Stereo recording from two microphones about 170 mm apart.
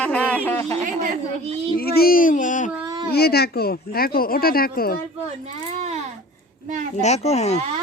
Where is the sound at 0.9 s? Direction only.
45° right (ahead or behind).